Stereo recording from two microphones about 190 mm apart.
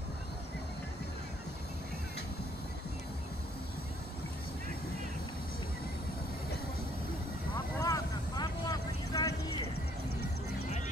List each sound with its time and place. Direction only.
7.8 s vehicle: 20° left (ahead or behind)